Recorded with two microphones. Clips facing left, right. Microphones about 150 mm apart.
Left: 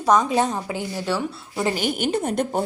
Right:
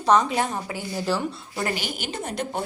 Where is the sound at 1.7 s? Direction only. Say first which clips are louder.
Left 8 dB; 50° left (ahead or behind).